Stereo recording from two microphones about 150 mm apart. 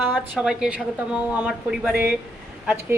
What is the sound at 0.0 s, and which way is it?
A woman's voice, 5° right (ahead or behind).